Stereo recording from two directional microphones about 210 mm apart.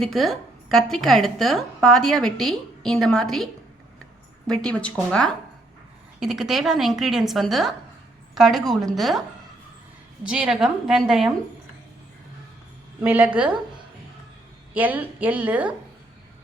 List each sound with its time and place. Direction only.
0.0 s a woman's voice: centre (ahead or behind)
10.2 s a woman's voice: 5° right (ahead or behind)
13.0 s a woman's voice: 10° right (ahead or behind)
14.7 s a woman's voice: 10° right (ahead or behind)